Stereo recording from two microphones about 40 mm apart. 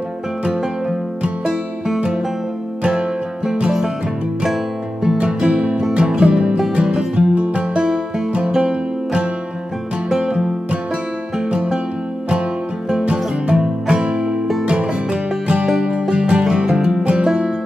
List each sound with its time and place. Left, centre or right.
1.4 s music: centre
5.2 s music: right
6.7 s music: right; by 10.5 s centre
13.0 s music: right
17.0 s music: right